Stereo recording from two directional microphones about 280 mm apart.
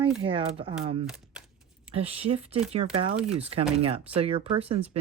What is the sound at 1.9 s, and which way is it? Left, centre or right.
Speech, right.